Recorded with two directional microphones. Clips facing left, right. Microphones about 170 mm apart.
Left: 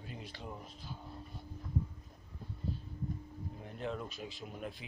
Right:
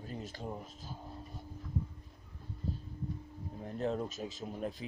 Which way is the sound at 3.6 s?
40° right (ahead or behind).